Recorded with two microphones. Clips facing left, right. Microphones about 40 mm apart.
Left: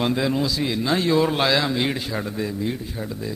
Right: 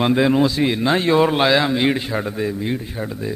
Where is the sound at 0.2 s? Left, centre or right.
Right.